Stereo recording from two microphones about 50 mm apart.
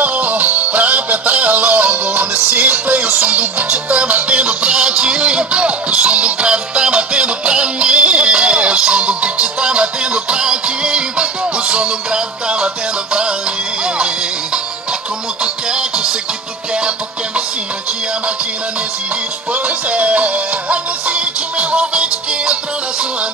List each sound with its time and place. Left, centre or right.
0.0 s music: right; by 16.2 s centre
19.5 s music: right